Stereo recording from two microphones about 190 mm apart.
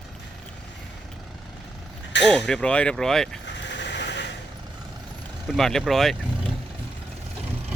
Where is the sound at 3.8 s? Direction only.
65° left (ahead or behind).